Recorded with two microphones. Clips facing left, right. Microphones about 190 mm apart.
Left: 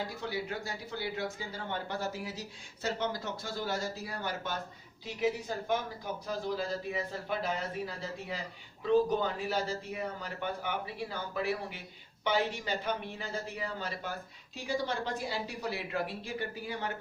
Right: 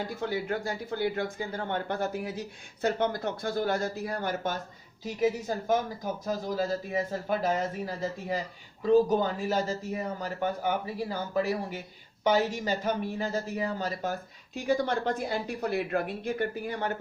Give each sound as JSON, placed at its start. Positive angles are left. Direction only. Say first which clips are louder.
{"t": 0.2, "sound": "a man's voice", "louder": "right 6 dB", "side_deg": -50}
{"t": 14.5, "sound": "speech", "louder": "right 6 dB", "side_deg": -55}